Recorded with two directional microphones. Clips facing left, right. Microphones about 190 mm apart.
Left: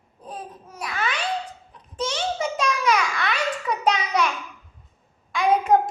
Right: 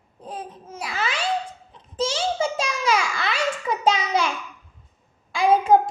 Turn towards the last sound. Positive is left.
turn(degrees=-30)  # may be behind; listen again after turning